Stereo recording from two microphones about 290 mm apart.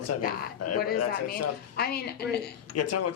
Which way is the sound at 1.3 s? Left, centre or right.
Left.